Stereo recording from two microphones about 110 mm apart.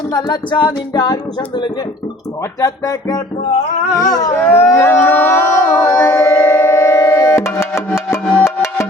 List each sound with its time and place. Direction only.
0.1 s music: 40° left (ahead or behind)
1.4 s speech: 45° left (ahead or behind)
2.6 s music: 30° left (ahead or behind)
4.4 s a sound: 20° left (ahead or behind)
7.8 s music: 20° left (ahead or behind)